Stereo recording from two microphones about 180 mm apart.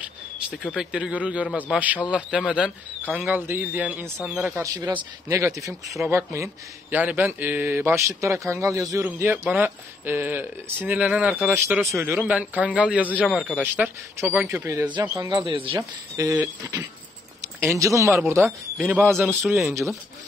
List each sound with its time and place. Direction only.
0.5 s speech: 5° left (ahead or behind)
0.9 s speech: 5° right (ahead or behind)
4.6 s speech: 20° right (ahead or behind)
16.2 s speech: 20° right (ahead or behind)